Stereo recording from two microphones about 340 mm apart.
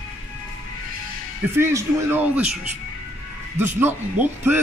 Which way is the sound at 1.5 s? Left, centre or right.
Centre.